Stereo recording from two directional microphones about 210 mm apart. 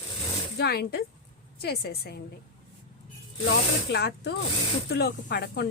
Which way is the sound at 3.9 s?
55° left (ahead or behind).